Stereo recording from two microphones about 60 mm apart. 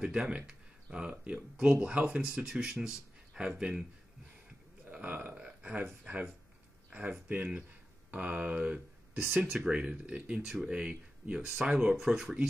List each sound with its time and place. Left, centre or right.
0.0 s speech: centre
4.9 s burping: right
5.3 s speech: centre
6.9 s speech: right
10.4 s speech: centre
10.7 s speech: centre